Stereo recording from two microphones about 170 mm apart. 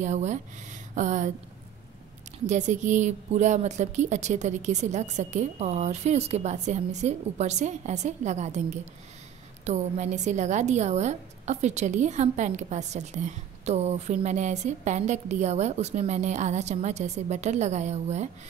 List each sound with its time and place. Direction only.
0.0 s a woman's voice: 45° right (ahead or behind)
2.4 s a woman's voice: 45° right (ahead or behind)